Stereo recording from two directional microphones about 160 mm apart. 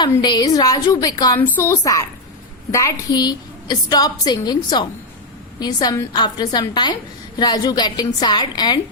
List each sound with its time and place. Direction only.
0.1 s a woman's voice: 25° left (ahead or behind)